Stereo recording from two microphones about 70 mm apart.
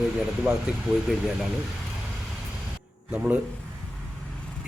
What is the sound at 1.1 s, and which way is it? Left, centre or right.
Speech, centre.